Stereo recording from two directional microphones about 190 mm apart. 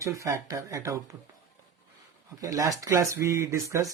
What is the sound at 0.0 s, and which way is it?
A man's voice, 15° right (ahead or behind).